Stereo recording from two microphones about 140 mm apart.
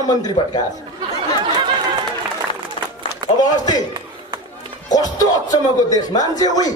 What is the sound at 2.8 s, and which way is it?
Run, 40° left (ahead or behind).